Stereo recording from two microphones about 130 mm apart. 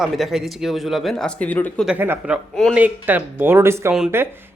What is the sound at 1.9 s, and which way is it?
Speech, 15° right (ahead or behind).